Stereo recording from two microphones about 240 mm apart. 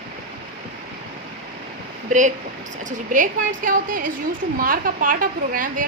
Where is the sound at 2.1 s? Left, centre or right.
Right.